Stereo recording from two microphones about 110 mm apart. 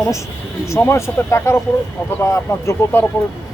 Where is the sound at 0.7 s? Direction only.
25° left (ahead or behind).